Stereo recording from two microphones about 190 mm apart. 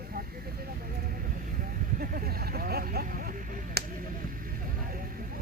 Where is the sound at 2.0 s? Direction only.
50° right (ahead or behind).